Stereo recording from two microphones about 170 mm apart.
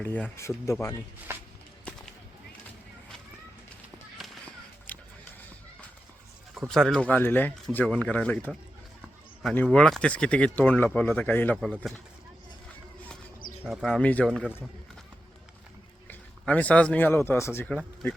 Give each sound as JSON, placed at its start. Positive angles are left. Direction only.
{"t": 0.0, "sound": "speech", "side_deg": 10}
{"t": 4.2, "sound": "a sound", "side_deg": 5}
{"t": 6.7, "sound": "speech", "side_deg": 0}
{"t": 11.5, "sound": "speech", "side_deg": 0}
{"t": 13.7, "sound": "speech", "side_deg": 5}
{"t": 16.0, "sound": "speech", "side_deg": 10}